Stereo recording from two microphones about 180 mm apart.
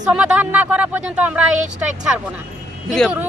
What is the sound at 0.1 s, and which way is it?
Speech, 5° right (ahead or behind).